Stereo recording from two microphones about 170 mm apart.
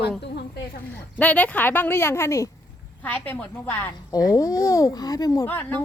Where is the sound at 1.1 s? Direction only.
10° left (ahead or behind).